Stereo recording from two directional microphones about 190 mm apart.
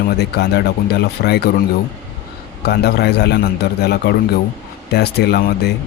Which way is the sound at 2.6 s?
60° left (ahead or behind).